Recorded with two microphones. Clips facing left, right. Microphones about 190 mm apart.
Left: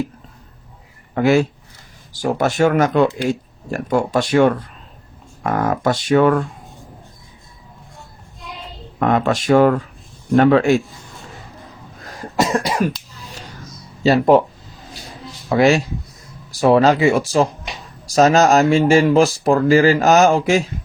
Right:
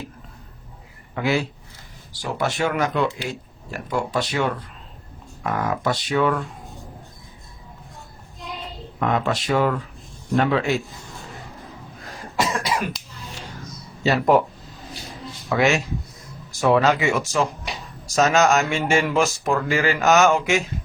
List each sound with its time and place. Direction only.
1.1 s speech: 45° left (ahead or behind)
9.0 s speech: 50° left (ahead or behind)
12.4 s cough: 40° left (ahead or behind)
14.0 s speech: 30° left (ahead or behind)
15.4 s speech: 35° left (ahead or behind)